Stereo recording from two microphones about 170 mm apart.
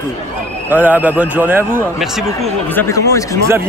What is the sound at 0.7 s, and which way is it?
A man's voice, 10° right (ahead or behind).